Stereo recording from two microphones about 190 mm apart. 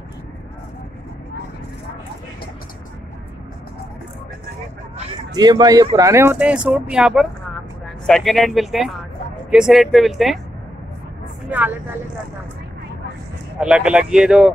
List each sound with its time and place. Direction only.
5.3 s speech: 20° right (ahead or behind); by 10.4 s centre (ahead or behind)
11.5 s speech: 10° right (ahead or behind)
13.6 s speech: 5° right (ahead or behind)